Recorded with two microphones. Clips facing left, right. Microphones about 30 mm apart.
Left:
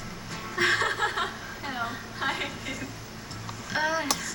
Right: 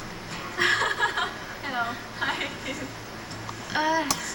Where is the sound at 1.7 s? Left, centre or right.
Centre.